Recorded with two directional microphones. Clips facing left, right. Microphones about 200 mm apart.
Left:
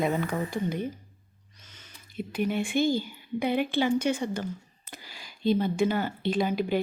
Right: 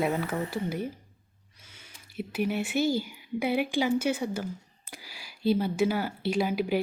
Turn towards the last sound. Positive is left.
turn(degrees=-10)  # may be behind; listen again after turning